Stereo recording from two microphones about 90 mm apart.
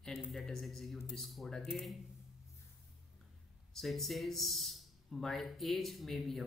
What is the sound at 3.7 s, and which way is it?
A man's voice, centre (ahead or behind).